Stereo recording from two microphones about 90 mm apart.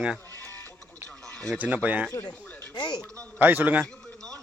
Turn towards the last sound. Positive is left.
turn(degrees=10)  # may be behind; listen again after turning